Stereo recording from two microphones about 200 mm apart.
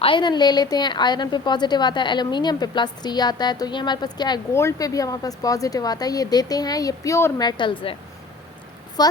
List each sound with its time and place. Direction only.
0.0 s a woman's voice: 25° left (ahead or behind)
9.0 s a woman's voice: 20° left (ahead or behind)